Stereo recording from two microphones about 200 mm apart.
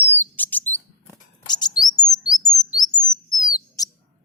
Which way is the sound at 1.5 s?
20° left (ahead or behind).